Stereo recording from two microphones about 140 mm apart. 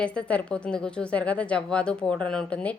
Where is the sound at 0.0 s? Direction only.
10° left (ahead or behind).